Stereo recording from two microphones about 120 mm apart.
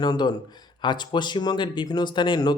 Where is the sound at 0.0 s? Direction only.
35° left (ahead or behind).